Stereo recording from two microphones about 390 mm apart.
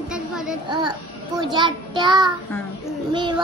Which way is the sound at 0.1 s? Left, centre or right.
Centre.